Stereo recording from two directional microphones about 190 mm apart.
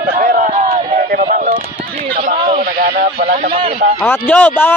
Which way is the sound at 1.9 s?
40° right (ahead or behind).